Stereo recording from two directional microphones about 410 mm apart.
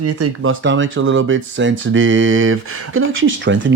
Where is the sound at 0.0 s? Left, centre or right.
Right.